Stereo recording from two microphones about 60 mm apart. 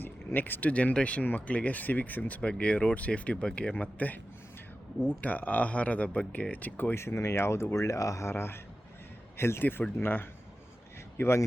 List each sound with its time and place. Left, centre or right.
0.0 s a sound: left
0.7 s speech: left
6.9 s speech: left
8.3 s speech: left